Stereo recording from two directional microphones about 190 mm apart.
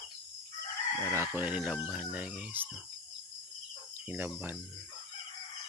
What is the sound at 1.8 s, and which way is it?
Speech, centre (ahead or behind).